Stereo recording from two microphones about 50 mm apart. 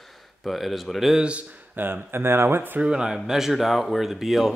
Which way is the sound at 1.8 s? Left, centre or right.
Right.